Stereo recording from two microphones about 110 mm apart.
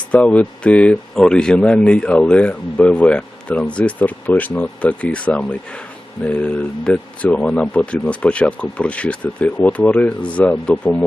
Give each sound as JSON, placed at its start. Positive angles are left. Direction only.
{"t": 0.1, "sound": "speech", "side_deg": 10}